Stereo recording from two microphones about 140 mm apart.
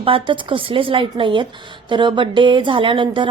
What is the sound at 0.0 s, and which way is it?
A woman's voice, 40° right (ahead or behind).